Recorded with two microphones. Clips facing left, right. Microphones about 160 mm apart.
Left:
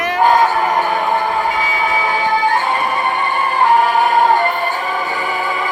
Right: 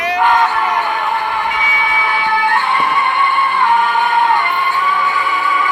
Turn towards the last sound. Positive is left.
turn(degrees=40)  # may be behind; listen again after turning